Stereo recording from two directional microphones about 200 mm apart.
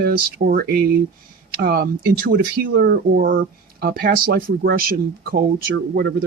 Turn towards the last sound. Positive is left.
turn(degrees=-55)  # may be behind; listen again after turning